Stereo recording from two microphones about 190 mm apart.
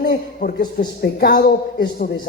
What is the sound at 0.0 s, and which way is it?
A man's voice, 50° left (ahead or behind).